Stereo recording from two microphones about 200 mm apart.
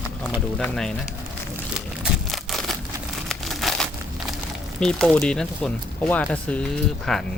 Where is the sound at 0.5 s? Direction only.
5° left (ahead or behind).